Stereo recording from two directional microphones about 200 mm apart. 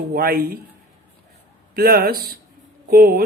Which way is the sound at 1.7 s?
50° right (ahead or behind).